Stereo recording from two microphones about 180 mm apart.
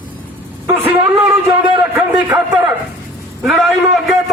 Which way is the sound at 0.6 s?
10° right (ahead or behind).